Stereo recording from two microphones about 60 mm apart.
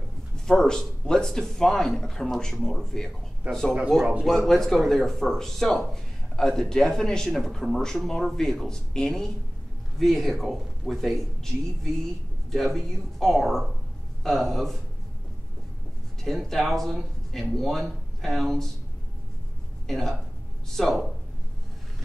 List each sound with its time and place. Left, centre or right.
0.5 s speech: centre
3.4 s speech: right
3.9 s speech: centre
16.3 s speech: centre
19.9 s speech: centre